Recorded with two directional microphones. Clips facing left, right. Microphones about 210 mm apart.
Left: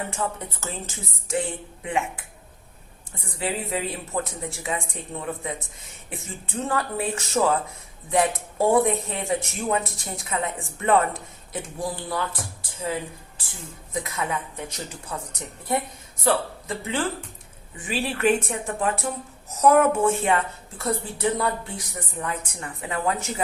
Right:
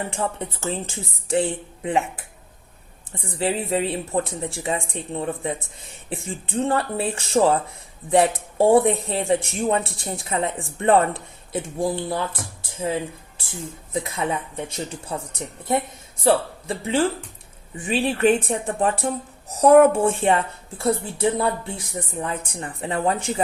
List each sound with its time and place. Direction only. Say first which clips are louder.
0.1 s speech: right 3 dB; 30° right (ahead or behind)
3.3 s speech: right 5 dB; 30° right (ahead or behind)